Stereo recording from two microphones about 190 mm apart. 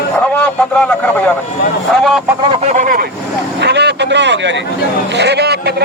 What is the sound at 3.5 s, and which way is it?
Vehicle, 65° right (ahead or behind).